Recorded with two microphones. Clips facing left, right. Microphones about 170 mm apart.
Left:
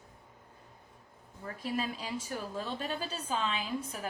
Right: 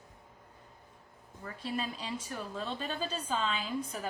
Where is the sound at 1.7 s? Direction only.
10° left (ahead or behind).